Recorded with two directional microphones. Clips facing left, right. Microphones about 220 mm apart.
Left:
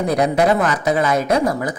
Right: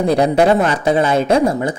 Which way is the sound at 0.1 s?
30° right (ahead or behind).